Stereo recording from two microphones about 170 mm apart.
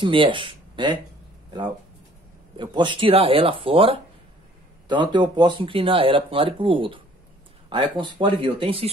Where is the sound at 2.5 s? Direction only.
30° right (ahead or behind).